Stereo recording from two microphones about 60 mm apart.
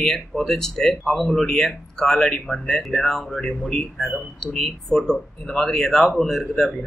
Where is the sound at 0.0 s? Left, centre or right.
Centre.